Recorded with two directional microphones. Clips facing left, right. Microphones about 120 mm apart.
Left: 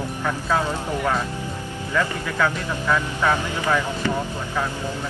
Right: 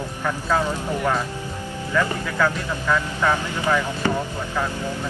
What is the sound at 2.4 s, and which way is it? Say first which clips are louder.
Speech: even; 5° left (ahead or behind).